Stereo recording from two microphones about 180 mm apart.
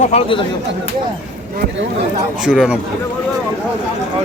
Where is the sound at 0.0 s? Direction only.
35° left (ahead or behind).